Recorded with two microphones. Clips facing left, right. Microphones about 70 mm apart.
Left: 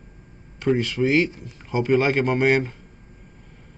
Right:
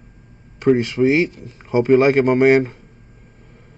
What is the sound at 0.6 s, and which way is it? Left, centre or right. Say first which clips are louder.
Speech: right 6 dB; right.